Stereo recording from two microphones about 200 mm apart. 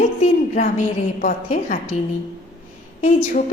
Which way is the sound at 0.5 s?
40° left (ahead or behind).